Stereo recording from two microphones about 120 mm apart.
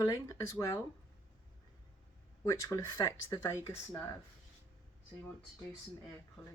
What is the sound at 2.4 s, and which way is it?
Speech, 25° left (ahead or behind).